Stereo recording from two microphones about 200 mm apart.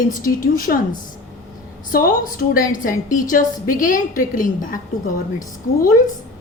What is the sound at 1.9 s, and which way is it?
A woman's voice, 45° left (ahead or behind).